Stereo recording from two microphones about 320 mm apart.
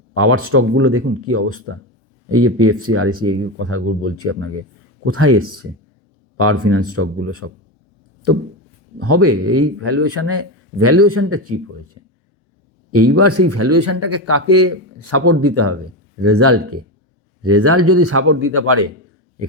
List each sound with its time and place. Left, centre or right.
0.2 s speech: right
9.0 s speech: right
12.9 s speech: right